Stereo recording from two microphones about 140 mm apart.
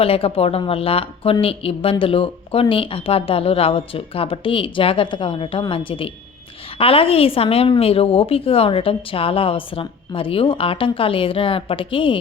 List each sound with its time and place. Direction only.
0.0 s speech: 45° left (ahead or behind)